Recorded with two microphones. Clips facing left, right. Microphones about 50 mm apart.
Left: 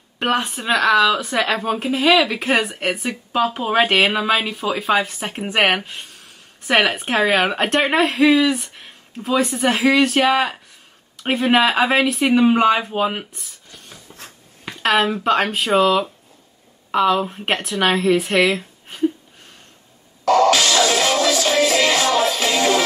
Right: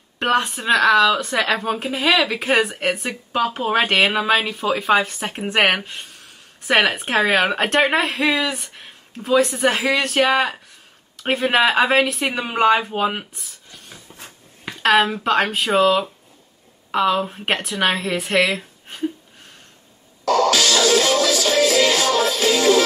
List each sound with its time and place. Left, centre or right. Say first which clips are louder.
0.2 s speech: right 1 dB; centre
20.2 s music: left 2 dB; left